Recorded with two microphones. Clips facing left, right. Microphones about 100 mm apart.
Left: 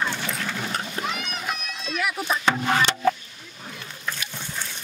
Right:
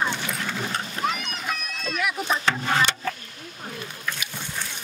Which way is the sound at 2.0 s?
Centre (ahead or behind).